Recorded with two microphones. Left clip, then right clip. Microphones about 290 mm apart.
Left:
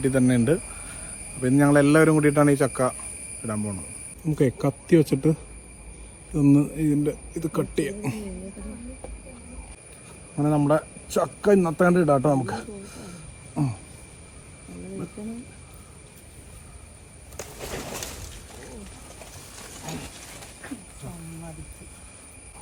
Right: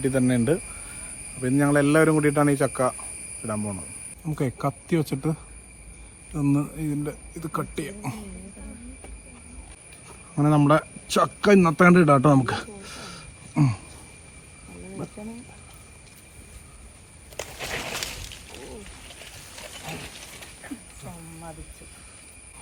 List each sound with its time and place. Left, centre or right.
0.0 s speech: centre
10.4 s a man's voice: right